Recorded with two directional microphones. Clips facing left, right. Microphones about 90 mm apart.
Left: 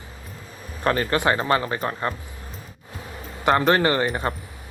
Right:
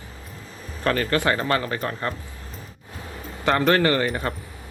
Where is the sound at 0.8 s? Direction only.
25° left (ahead or behind).